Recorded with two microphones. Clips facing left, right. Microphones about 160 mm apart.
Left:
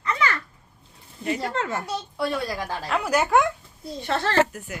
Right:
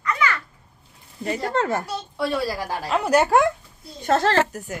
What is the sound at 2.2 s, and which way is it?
Speech, 5° right (ahead or behind).